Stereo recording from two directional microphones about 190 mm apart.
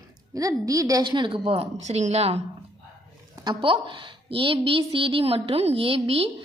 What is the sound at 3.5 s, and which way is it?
A woman's voice, 25° right (ahead or behind).